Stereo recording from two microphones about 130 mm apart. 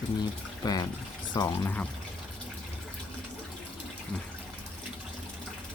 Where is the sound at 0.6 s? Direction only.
30° left (ahead or behind).